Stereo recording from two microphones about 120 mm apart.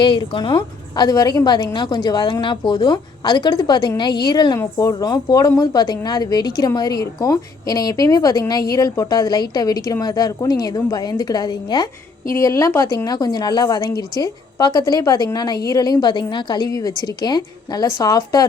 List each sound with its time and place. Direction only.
0.0 s speech: 40° left (ahead or behind)
12.3 s speech: 25° left (ahead or behind)